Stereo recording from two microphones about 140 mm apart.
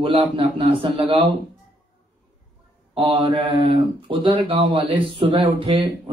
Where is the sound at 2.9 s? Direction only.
40° right (ahead or behind).